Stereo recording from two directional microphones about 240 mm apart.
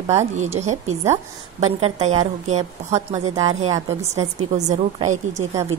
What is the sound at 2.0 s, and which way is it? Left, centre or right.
A woman's voice, right.